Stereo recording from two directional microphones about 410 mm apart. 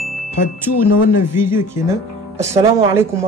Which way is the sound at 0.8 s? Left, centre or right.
Left.